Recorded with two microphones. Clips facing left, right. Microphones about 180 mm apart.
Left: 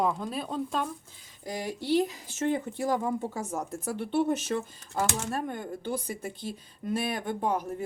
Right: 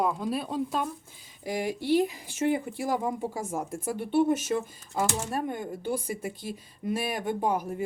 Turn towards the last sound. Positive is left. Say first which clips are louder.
# right 2 dB
turn(degrees=-10)  # may be behind; listen again after turning